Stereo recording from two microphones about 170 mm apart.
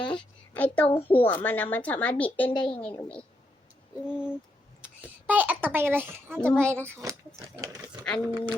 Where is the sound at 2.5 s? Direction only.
25° left (ahead or behind).